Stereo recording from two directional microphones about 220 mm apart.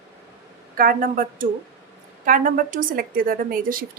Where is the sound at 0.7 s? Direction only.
40° right (ahead or behind).